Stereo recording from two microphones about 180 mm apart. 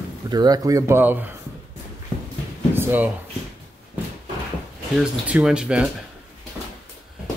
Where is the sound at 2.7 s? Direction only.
10° right (ahead or behind).